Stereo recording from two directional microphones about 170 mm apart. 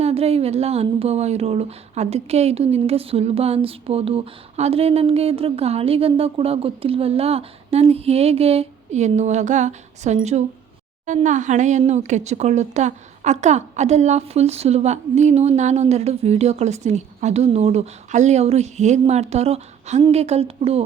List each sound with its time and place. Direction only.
0.0 s a woman's voice: 35° right (ahead or behind)